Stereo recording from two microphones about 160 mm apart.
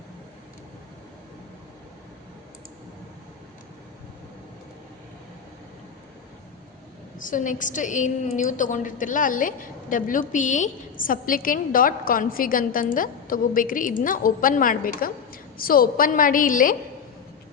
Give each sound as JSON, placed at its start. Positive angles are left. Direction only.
{"t": 7.2, "sound": "a woman's voice", "side_deg": 55}